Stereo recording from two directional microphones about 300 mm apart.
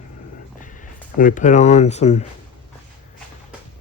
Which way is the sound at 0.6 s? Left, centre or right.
Left.